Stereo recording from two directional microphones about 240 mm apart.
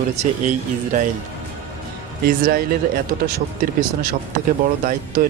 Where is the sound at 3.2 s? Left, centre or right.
Right.